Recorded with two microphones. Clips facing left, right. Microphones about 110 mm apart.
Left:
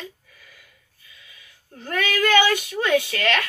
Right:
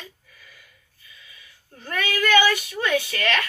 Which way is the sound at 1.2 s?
60° left (ahead or behind).